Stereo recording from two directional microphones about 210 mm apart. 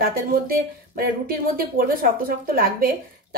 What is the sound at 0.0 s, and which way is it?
Speech, 45° right (ahead or behind).